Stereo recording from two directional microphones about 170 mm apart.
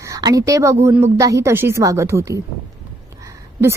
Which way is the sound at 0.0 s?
20° right (ahead or behind).